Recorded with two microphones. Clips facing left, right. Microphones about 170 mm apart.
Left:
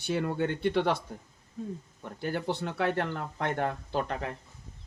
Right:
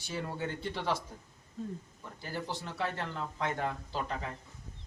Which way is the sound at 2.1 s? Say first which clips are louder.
Left 7 dB; 60° left (ahead or behind).